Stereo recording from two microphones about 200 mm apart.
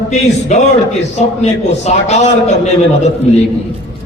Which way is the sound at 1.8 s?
35° left (ahead or behind).